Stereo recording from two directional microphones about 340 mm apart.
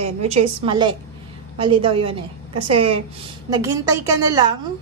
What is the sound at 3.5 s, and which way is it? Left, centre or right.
A woman's voice, centre.